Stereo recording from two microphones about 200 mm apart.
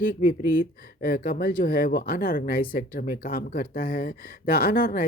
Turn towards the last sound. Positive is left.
turn(degrees=45)  # may be behind; listen again after turning